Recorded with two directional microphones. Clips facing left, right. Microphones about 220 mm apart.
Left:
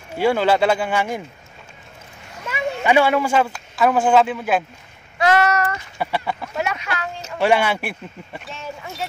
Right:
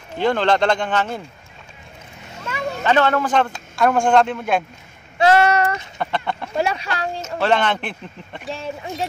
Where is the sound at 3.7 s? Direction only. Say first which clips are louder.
Even; 5° left (ahead or behind).